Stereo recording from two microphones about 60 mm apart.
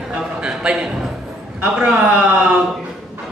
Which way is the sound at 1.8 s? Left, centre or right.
Centre.